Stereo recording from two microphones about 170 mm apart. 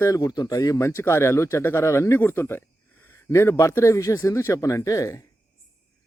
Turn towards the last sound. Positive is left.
turn(degrees=20)  # may be behind; listen again after turning